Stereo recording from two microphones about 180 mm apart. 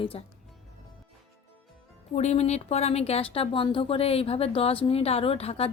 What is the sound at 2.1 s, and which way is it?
Speech, 40° left (ahead or behind).